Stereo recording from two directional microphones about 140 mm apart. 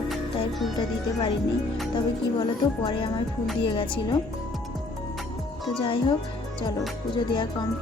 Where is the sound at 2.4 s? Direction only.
35° left (ahead or behind).